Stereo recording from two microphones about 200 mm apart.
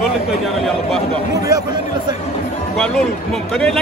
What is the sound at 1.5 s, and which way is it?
Speech, 20° right (ahead or behind).